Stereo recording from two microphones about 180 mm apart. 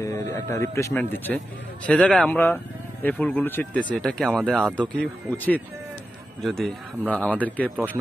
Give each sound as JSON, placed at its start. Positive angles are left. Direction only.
{"t": 0.0, "sound": "speech", "side_deg": 15}
{"t": 7.7, "sound": "speech", "side_deg": -10}